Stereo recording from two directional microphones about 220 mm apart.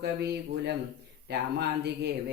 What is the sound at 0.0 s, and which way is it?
Speech, 50° right (ahead or behind).